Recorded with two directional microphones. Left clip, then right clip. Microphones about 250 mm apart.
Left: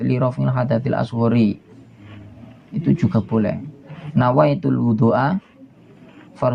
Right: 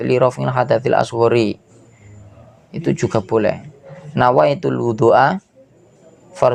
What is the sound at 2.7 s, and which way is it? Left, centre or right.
Speech, right.